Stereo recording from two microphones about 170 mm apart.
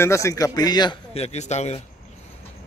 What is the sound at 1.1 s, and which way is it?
Speech, 40° left (ahead or behind).